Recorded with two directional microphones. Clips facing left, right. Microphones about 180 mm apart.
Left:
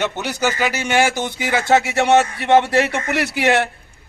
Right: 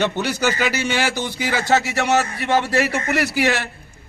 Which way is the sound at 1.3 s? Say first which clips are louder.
Left 3 dB; 50° left (ahead or behind).